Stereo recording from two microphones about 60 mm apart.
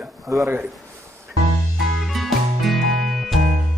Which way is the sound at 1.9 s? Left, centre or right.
Centre.